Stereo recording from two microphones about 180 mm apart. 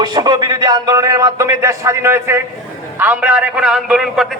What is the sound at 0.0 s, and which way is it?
A man's voice, 25° right (ahead or behind).